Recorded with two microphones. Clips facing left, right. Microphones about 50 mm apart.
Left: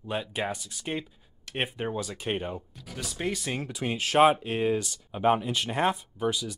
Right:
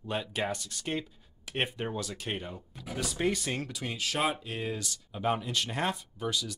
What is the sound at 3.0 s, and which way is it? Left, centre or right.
Speech, centre.